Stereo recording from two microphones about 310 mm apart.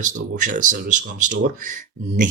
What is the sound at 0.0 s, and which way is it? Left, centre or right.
Speech, right.